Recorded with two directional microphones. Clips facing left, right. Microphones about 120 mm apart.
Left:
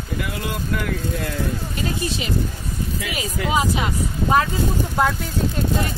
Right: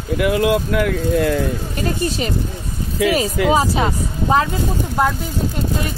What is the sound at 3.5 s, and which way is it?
Speech, 35° right (ahead or behind).